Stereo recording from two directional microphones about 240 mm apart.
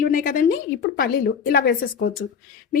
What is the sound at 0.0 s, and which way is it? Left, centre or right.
A woman's voice, left.